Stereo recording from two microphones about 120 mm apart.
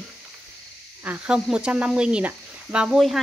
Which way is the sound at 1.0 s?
10° right (ahead or behind).